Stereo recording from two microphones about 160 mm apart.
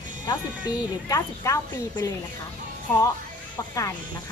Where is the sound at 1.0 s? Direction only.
20° left (ahead or behind).